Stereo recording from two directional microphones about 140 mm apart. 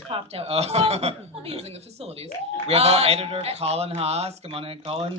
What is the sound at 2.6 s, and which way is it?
A man's voice, 45° right (ahead or behind).